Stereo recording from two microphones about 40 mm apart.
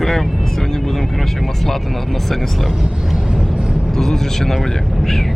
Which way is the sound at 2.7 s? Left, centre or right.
Centre.